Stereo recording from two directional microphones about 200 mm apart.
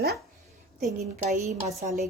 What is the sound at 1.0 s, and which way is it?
Speech, 35° right (ahead or behind).